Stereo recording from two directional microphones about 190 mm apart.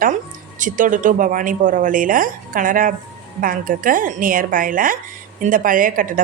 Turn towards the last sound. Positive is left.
turn(degrees=-45)  # may be behind; listen again after turning